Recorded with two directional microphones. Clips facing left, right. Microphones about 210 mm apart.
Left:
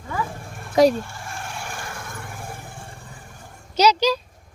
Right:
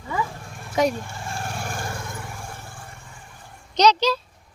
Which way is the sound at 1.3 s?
45° right (ahead or behind).